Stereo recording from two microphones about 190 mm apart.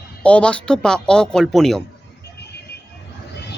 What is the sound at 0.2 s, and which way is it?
Speech, 5° left (ahead or behind).